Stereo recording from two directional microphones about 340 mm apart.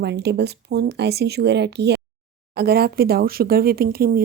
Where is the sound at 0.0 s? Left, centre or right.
Right.